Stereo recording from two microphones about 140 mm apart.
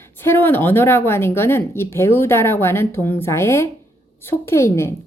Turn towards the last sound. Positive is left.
turn(degrees=20)  # may be behind; listen again after turning